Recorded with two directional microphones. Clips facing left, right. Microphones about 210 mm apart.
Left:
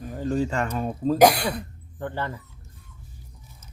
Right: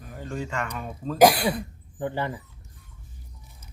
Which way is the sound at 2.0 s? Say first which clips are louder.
Right 2 dB; 15° right (ahead or behind).